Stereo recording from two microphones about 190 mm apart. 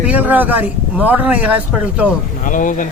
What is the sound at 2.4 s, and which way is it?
Speech, 45° left (ahead or behind).